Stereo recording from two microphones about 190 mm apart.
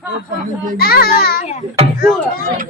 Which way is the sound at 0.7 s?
55° left (ahead or behind).